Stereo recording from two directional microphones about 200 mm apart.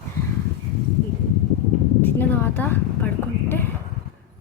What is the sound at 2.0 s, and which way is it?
Speech, 10° left (ahead or behind).